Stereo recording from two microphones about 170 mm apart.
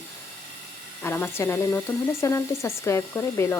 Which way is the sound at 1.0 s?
15° left (ahead or behind).